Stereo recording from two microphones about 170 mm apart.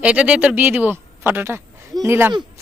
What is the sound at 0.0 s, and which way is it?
Speech, 5° right (ahead or behind).